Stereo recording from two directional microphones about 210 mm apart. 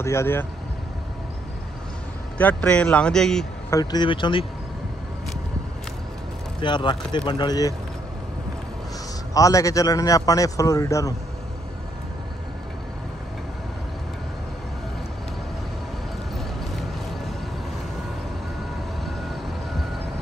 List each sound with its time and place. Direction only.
0.0 s a man's voice: 10° left (ahead or behind)
2.3 s speech: 5° left (ahead or behind)
3.7 s speech: 20° left (ahead or behind)
6.6 s speech: 20° left (ahead or behind)
9.3 s a man's voice: 15° left (ahead or behind)